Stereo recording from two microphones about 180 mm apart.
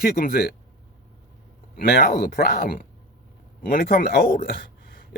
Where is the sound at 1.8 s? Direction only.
60° left (ahead or behind).